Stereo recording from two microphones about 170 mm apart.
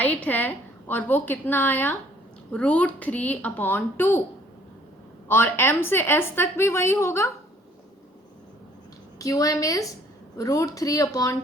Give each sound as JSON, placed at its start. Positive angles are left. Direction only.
{"t": 0.0, "sound": "a woman's voice", "side_deg": 10}
{"t": 5.3, "sound": "a woman's voice", "side_deg": 15}
{"t": 9.1, "sound": "speech", "side_deg": 20}